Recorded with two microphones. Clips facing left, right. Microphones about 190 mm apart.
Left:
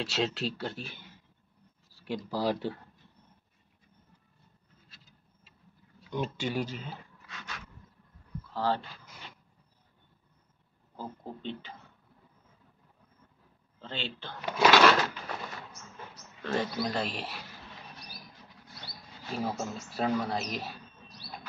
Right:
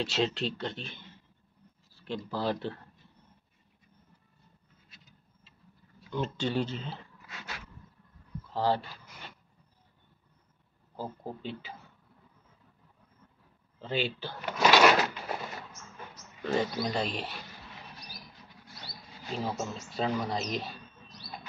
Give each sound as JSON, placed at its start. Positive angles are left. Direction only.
{"t": 0.0, "sound": "speech", "side_deg": 0}
{"t": 6.0, "sound": "speech", "side_deg": 15}
{"t": 7.2, "sound": "a sound", "side_deg": -25}
{"t": 8.5, "sound": "speech", "side_deg": -15}
{"t": 11.0, "sound": "speech", "side_deg": -5}
{"t": 13.7, "sound": "speech", "side_deg": -10}
{"t": 16.4, "sound": "speech", "side_deg": 0}
{"t": 19.3, "sound": "speech", "side_deg": 5}